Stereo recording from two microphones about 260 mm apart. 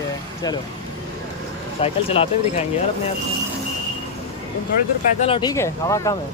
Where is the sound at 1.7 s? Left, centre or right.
Left.